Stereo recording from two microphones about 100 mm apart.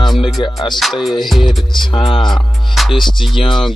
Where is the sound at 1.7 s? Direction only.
50° left (ahead or behind).